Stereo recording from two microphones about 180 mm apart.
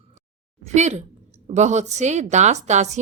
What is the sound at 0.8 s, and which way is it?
A woman's voice, 40° right (ahead or behind).